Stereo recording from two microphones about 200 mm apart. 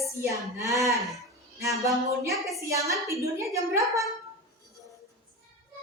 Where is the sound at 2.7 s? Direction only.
15° right (ahead or behind).